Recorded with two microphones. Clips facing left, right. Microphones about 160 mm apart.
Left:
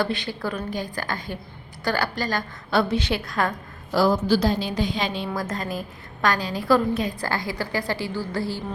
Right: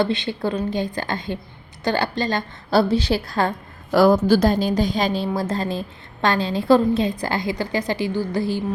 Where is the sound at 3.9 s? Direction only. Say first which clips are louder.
Right 5 dB; 60° right (ahead or behind).